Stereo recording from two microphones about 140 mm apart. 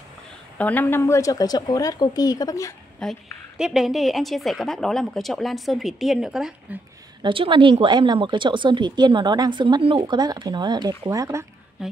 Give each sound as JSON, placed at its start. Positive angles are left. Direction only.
{"t": 0.6, "sound": "a woman's voice", "side_deg": 10}
{"t": 3.0, "sound": "a woman's voice", "side_deg": 0}
{"t": 7.2, "sound": "speech", "side_deg": -35}
{"t": 11.8, "sound": "a woman's voice", "side_deg": -5}